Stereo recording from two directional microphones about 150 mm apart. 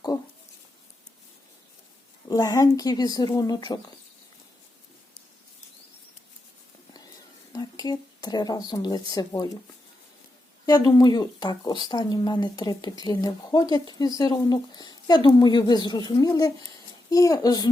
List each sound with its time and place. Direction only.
2.3 s speech: 25° left (ahead or behind)
7.5 s a sound: 25° left (ahead or behind)
10.7 s speech: 25° left (ahead or behind)